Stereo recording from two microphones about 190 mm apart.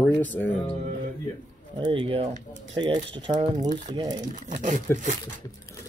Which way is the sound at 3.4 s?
40° right (ahead or behind).